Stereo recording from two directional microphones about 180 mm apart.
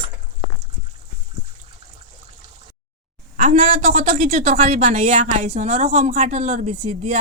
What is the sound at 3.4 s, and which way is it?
A woman's voice, 40° right (ahead or behind).